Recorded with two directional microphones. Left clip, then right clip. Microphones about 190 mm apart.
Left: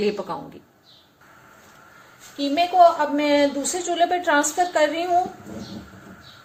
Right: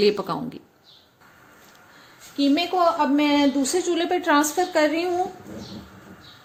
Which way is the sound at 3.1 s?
45° right (ahead or behind).